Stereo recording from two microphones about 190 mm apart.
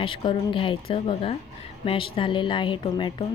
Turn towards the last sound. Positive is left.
turn(degrees=25)  # may be behind; listen again after turning